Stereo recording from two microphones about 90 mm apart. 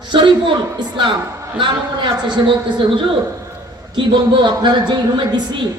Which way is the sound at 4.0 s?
60° right (ahead or behind).